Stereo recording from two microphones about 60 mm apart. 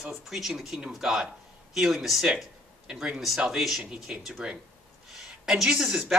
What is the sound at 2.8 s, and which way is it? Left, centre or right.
A man's voice, centre.